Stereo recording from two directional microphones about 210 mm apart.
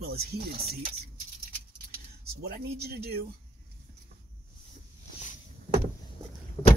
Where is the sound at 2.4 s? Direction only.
50° right (ahead or behind).